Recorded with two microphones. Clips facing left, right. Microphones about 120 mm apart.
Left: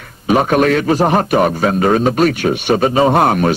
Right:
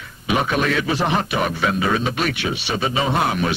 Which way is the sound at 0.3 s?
45° left (ahead or behind).